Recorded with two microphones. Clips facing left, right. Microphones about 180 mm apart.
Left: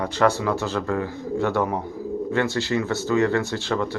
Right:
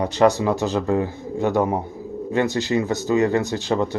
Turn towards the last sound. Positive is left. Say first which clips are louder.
# right 3 dB
turn(degrees=-20)  # may be behind; listen again after turning